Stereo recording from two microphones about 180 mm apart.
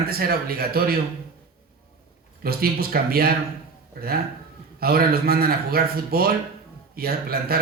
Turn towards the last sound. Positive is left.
turn(degrees=-55)  # may be behind; listen again after turning